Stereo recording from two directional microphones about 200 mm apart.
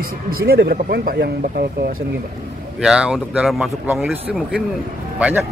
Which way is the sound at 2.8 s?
5° right (ahead or behind).